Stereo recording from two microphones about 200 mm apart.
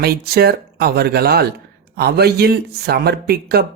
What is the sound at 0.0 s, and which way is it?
Speech, 50° right (ahead or behind).